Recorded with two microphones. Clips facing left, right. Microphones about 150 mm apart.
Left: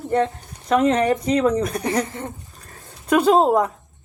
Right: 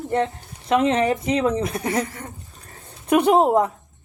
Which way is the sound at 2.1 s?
25° left (ahead or behind).